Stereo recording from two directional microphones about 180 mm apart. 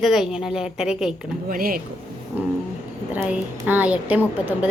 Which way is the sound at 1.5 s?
55° right (ahead or behind).